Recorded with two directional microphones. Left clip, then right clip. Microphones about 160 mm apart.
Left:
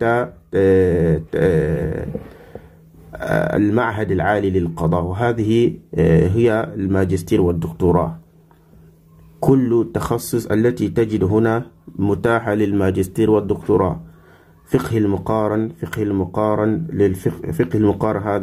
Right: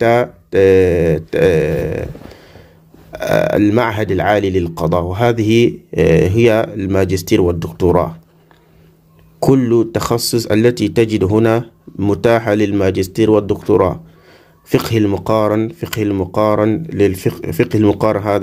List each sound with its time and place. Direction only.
0.0 s speech: 20° right (ahead or behind)
3.1 s a man's voice: 20° right (ahead or behind)
9.4 s a man's voice: 15° right (ahead or behind)